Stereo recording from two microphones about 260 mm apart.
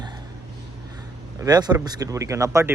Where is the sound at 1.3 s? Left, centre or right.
Centre.